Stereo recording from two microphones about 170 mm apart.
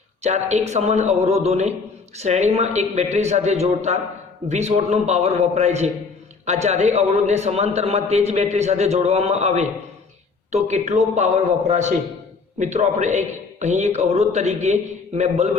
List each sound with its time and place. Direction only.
0.2 s a man's voice: 40° right (ahead or behind)